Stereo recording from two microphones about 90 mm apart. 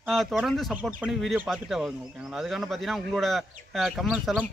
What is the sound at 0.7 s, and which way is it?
Speech, 20° right (ahead or behind).